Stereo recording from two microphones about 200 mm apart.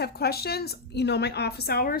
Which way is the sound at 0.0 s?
50° left (ahead or behind).